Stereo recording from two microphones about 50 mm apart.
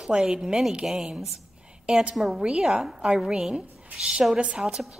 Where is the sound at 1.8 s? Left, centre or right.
Right.